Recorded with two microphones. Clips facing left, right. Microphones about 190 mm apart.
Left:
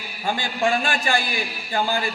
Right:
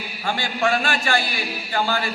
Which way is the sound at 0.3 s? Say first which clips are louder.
Even; 15° left (ahead or behind).